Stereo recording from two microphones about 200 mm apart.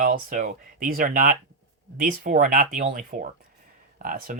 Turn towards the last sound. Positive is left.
turn(degrees=-45)  # may be behind; listen again after turning